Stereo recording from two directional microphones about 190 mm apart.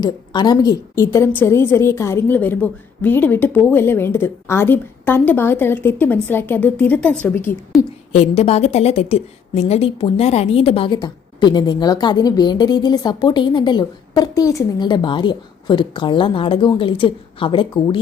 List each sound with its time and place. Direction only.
0.0 s a woman's voice: 20° left (ahead or behind)
8.1 s a woman's voice: 35° left (ahead or behind)